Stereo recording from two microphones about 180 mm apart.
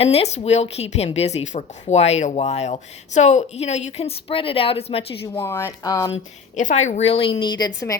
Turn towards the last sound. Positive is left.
turn(degrees=20)  # may be behind; listen again after turning